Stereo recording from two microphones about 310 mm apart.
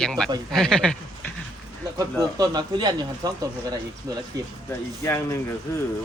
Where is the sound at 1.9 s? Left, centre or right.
Centre.